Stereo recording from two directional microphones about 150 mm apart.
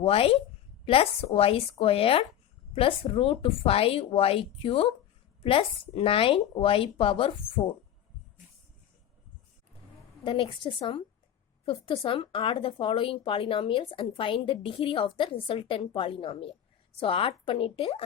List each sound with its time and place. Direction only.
0.0 s speech: 40° left (ahead or behind)
10.2 s speech: 35° left (ahead or behind)